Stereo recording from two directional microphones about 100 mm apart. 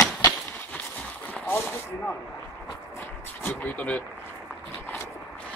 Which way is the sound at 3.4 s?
15° left (ahead or behind).